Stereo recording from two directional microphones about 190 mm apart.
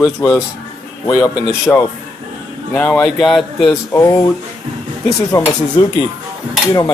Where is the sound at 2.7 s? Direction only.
5° left (ahead or behind).